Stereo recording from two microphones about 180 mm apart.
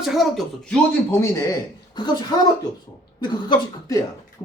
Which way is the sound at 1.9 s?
25° left (ahead or behind).